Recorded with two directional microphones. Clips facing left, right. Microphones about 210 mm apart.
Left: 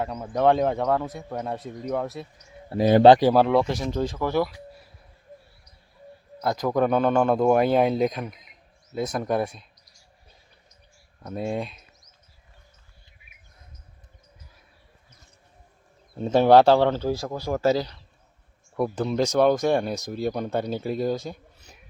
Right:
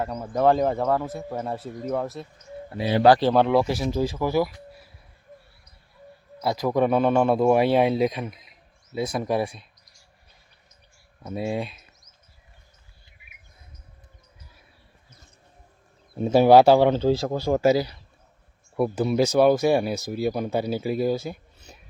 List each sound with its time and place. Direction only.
0.0 s speech: centre (ahead or behind)
2.6 s speech: 45° left (ahead or behind)
3.2 s speech: 10° left (ahead or behind)
3.4 s speech: 5° right (ahead or behind)
6.4 s speech: 5° right (ahead or behind)
11.2 s speech: 5° right (ahead or behind)
16.1 s speech: 10° right (ahead or behind)
17.0 s speech: 25° right (ahead or behind)
17.6 s speech: 10° right (ahead or behind)